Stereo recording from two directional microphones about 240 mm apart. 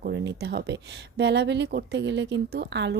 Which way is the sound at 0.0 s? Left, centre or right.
Right.